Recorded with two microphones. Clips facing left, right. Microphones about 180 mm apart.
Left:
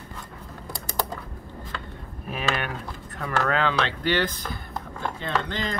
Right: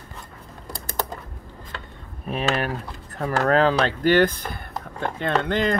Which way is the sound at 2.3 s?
35° right (ahead or behind).